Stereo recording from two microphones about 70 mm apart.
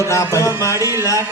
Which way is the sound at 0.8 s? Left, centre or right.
Right.